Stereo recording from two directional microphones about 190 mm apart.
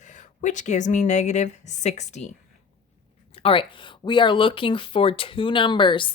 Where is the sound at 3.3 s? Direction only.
30° left (ahead or behind).